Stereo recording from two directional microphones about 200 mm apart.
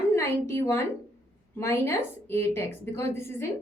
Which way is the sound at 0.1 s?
10° left (ahead or behind).